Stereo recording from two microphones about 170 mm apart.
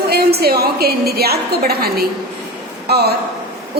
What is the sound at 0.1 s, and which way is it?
A woman's voice, 70° right (ahead or behind).